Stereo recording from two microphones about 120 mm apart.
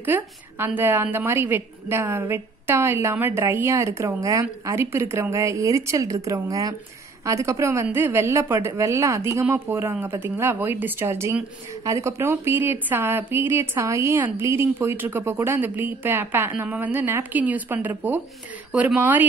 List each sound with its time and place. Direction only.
0.0 s a woman's voice: 15° right (ahead or behind)
18.7 s speech: 5° right (ahead or behind)
18.9 s a woman's voice: 15° right (ahead or behind)